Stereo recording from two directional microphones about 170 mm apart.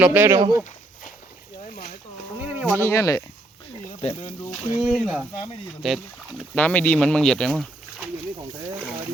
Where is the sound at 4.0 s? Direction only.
35° left (ahead or behind).